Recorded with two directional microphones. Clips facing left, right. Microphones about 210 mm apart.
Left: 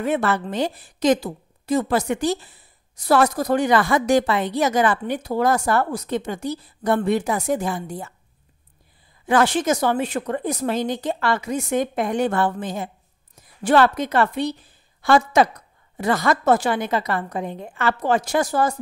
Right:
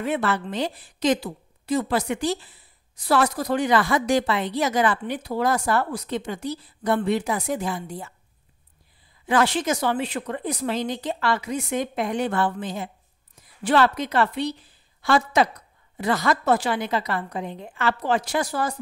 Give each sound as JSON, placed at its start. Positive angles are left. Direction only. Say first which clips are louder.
{"t": 0.0, "sound": "speech", "louder": "left 3 dB", "side_deg": 45}
{"t": 9.2, "sound": "speech", "louder": "left 3 dB", "side_deg": 45}